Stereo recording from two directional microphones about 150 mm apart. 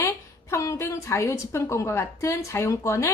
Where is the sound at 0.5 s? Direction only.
20° left (ahead or behind).